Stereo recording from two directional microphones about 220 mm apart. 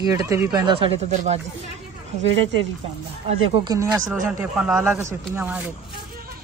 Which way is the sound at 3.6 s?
15° right (ahead or behind).